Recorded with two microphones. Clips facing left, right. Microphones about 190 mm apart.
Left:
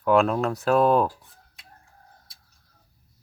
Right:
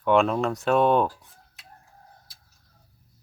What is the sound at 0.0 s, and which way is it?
Speech, centre (ahead or behind).